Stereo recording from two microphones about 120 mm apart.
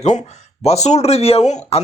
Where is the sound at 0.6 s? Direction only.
65° left (ahead or behind).